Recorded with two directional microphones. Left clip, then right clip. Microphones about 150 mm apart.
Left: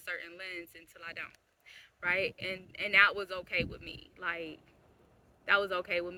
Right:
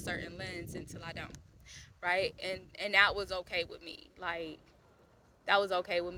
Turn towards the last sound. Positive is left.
turn(degrees=15)  # may be behind; listen again after turning